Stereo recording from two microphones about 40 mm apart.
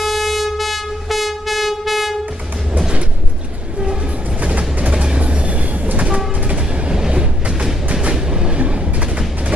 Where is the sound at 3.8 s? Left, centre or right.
Right.